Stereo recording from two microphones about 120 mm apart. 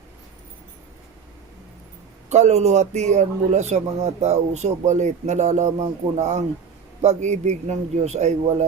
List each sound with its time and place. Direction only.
2.3 s speech: 70° right (ahead or behind)